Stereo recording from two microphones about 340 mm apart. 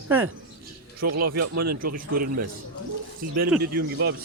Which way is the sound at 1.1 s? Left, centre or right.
Right.